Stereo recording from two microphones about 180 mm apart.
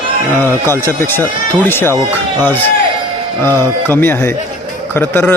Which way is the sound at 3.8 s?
10° left (ahead or behind).